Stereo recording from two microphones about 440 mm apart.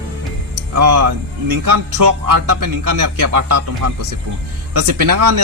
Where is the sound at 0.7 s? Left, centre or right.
Right.